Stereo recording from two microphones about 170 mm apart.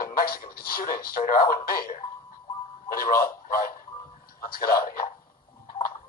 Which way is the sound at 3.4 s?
60° left (ahead or behind).